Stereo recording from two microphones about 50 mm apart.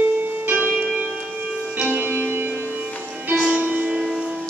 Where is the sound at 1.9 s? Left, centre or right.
Right.